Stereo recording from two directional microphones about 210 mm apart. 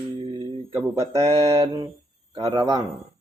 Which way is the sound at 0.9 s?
15° right (ahead or behind).